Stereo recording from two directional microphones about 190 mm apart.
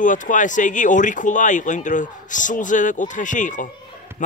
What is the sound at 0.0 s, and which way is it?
Speech, 40° left (ahead or behind).